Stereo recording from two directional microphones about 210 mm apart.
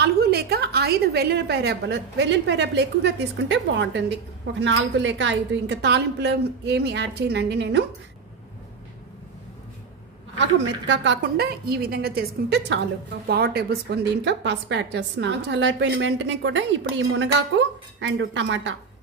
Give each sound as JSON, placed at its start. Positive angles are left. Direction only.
{"t": 0.0, "sound": "a woman's voice", "side_deg": -50}
{"t": 10.3, "sound": "a woman's voice", "side_deg": -60}